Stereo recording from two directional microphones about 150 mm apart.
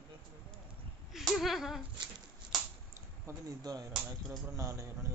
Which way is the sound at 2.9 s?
20° right (ahead or behind).